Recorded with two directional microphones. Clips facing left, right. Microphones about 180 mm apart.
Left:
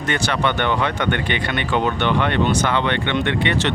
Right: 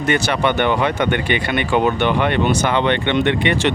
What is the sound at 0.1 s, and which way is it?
Speech, 10° right (ahead or behind).